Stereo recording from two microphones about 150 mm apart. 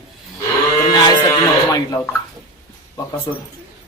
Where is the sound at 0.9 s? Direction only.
30° left (ahead or behind).